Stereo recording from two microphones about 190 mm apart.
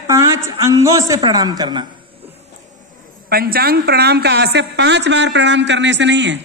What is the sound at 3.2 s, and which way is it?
A woman's voice, 50° right (ahead or behind).